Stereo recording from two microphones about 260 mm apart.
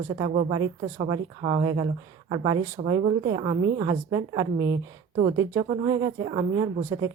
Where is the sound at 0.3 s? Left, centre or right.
Right.